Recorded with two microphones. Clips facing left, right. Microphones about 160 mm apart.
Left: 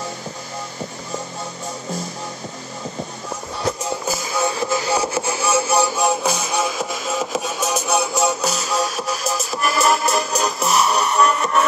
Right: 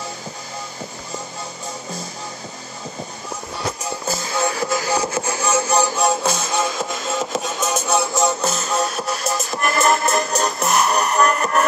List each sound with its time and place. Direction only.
4.1 s music: 10° left (ahead or behind)
4.5 s music: 25° left (ahead or behind)
4.8 s music: 15° left (ahead or behind)